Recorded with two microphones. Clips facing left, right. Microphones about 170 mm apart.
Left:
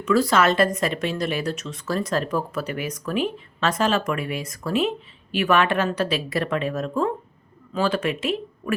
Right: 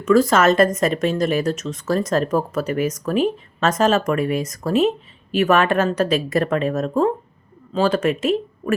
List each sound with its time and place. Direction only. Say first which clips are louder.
0.0 s speech: right 4 dB; 45° right (ahead or behind)